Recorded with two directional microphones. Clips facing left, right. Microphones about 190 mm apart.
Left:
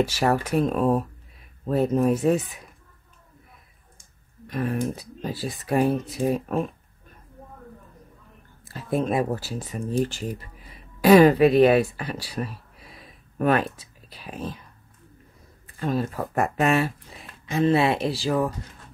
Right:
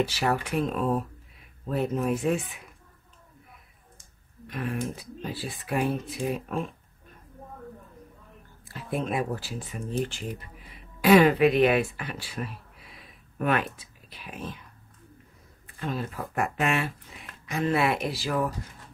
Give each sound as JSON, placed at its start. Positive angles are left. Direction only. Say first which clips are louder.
{"t": 0.0, "sound": "speech", "louder": "left 4 dB", "side_deg": 45}
{"t": 4.5, "sound": "speech", "louder": "left 5 dB", "side_deg": 40}
{"t": 8.6, "sound": "speech", "louder": "left 6 dB", "side_deg": 40}
{"t": 15.8, "sound": "speech", "louder": "left 6 dB", "side_deg": 40}
{"t": 17.5, "sound": "speech", "louder": "left 5 dB", "side_deg": 25}